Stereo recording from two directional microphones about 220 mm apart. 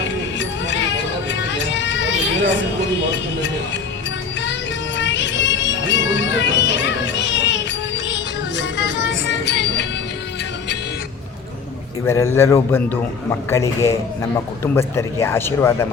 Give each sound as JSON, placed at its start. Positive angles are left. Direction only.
{"t": 0.3, "sound": "music", "side_deg": 55}
{"t": 4.9, "sound": "music", "side_deg": 55}
{"t": 12.0, "sound": "a man's voice", "side_deg": 15}